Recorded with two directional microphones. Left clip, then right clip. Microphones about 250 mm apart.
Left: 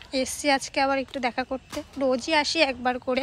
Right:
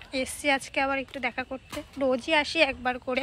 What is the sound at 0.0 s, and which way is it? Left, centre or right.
Speech, centre.